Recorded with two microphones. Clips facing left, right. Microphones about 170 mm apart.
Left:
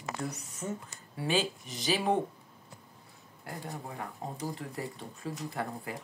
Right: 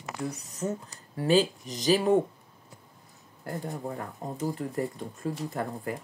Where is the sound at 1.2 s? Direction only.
40° right (ahead or behind).